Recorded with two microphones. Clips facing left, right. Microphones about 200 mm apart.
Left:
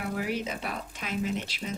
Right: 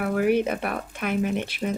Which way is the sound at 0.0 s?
60° right (ahead or behind).